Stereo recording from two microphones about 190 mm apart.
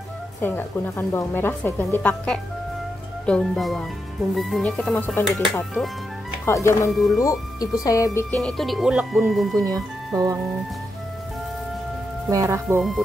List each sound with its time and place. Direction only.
0.4 s a woman's voice: 10° left (ahead or behind)
6.4 s a woman's voice: 15° left (ahead or behind)
6.9 s speech: centre (ahead or behind)
7.2 s a woman's voice: 15° left (ahead or behind)
8.4 s speech: centre (ahead or behind)
10.1 s speech: 15° right (ahead or behind)
12.3 s speech: 15° right (ahead or behind)